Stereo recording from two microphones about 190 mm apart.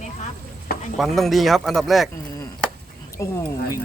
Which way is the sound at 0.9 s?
Centre (ahead or behind).